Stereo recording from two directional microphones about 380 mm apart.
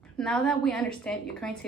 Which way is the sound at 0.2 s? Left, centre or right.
Centre.